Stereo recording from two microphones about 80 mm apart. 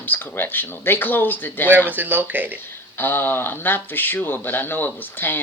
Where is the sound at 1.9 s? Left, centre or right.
Right.